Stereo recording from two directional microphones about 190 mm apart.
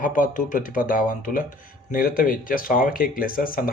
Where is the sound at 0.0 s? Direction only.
45° left (ahead or behind).